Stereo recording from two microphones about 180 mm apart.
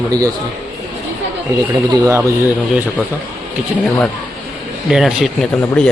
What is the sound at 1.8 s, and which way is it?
Speech, 20° right (ahead or behind).